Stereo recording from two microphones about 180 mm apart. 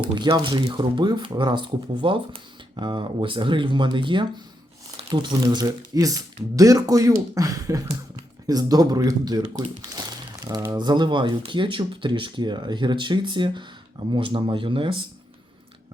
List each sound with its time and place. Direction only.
0.0 s speech: 25° right (ahead or behind)